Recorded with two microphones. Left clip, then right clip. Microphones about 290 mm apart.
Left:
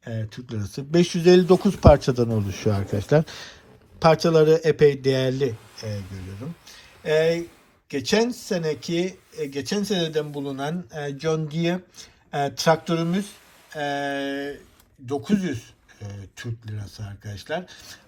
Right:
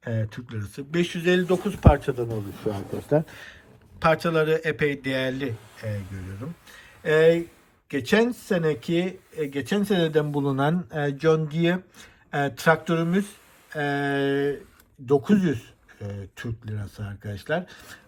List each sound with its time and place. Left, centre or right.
0.0 s speech: centre
0.5 s speech: centre
3.2 s speech: centre